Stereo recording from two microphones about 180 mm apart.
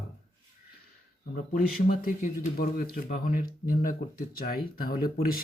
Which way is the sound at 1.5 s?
50° left (ahead or behind).